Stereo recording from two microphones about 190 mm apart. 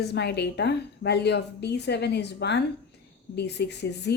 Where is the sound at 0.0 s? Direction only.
60° left (ahead or behind).